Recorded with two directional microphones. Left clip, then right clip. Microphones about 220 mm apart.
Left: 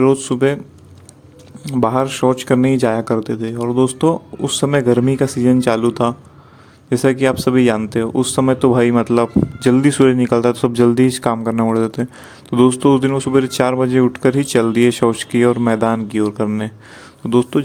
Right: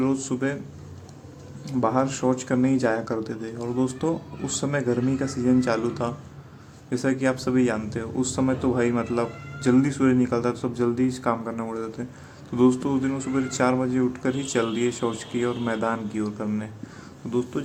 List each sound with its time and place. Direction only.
0.0 s speech: 40° left (ahead or behind)
1.6 s speech: 40° left (ahead or behind)